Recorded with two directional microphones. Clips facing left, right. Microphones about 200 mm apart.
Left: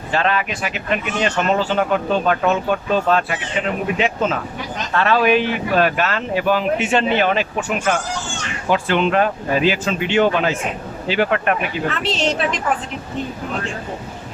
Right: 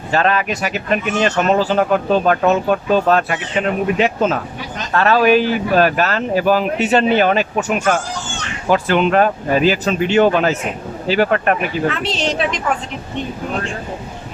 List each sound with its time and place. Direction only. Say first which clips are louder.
0.1 s speech: right 3 dB; 45° right (ahead or behind)
8.7 s speech: right 3 dB; 45° right (ahead or behind)
11.9 s a woman's voice: right 1 dB; centre (ahead or behind)